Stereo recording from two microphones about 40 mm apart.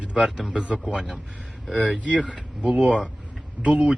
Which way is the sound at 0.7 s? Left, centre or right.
Right.